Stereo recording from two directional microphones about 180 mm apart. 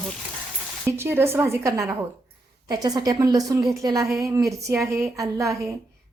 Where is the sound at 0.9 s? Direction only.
15° right (ahead or behind).